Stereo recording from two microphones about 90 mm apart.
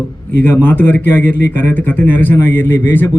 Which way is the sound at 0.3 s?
20° left (ahead or behind).